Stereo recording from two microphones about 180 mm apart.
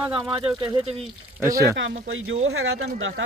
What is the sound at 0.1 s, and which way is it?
Speech, 25° right (ahead or behind).